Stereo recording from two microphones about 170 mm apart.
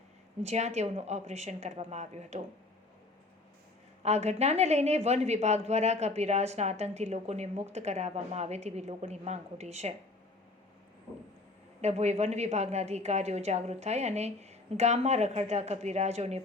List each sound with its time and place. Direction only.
0.4 s speech: 40° right (ahead or behind)
4.0 s speech: 40° right (ahead or behind)
11.8 s speech: 40° right (ahead or behind)